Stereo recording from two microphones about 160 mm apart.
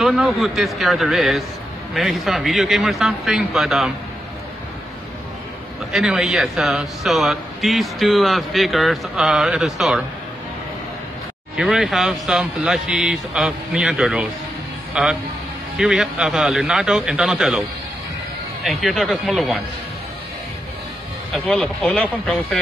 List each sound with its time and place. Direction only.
0.0 s a man's voice: centre (ahead or behind)
5.9 s a man's voice: 5° right (ahead or behind)
11.5 s a man's voice: centre (ahead or behind)
21.3 s a man's voice: 5° left (ahead or behind)